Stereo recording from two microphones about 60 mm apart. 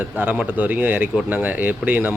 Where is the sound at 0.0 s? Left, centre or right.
Right.